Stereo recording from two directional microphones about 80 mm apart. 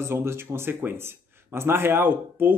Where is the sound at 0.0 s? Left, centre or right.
Right.